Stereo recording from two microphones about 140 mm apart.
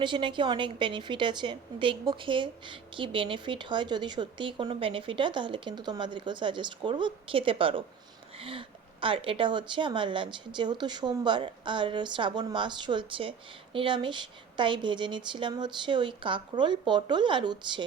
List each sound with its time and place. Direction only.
0.0 s a woman's voice: 35° right (ahead or behind)